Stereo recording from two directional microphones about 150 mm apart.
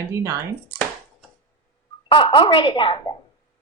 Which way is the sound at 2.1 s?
35° left (ahead or behind).